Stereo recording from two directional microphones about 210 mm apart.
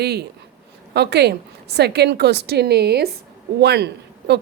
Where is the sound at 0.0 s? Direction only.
50° right (ahead or behind).